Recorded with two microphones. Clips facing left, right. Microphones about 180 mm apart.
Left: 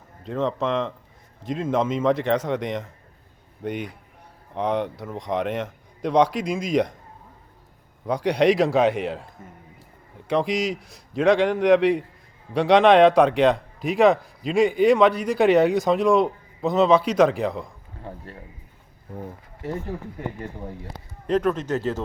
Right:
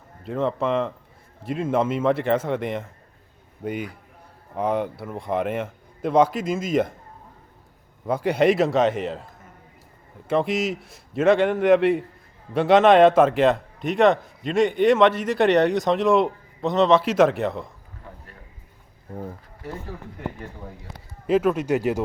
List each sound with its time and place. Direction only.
0.3 s a man's voice: 5° right (ahead or behind)
8.0 s a man's voice: 5° right (ahead or behind)
18.1 s a sound: 30° left (ahead or behind)
21.2 s a man's voice: 5° right (ahead or behind)